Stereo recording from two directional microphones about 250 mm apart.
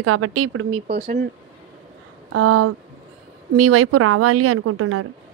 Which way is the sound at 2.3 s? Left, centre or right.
Right.